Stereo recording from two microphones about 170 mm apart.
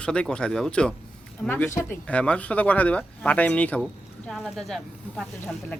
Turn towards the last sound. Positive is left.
turn(degrees=5)  # may be behind; listen again after turning